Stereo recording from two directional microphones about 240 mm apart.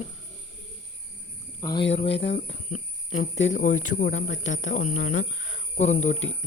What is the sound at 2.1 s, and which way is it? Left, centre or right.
Speech, left.